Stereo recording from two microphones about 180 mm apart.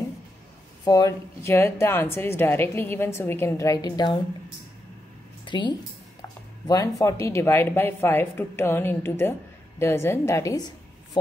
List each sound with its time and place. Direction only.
0.8 s a woman's voice: 20° left (ahead or behind)
5.4 s a woman's voice: 25° left (ahead or behind)